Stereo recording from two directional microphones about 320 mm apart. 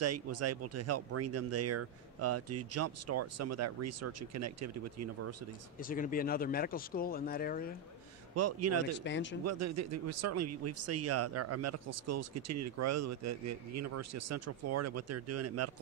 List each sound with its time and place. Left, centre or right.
0.0 s speech: right
5.8 s speech: left
8.4 s speech: right
9.0 s speech: left
9.4 s speech: right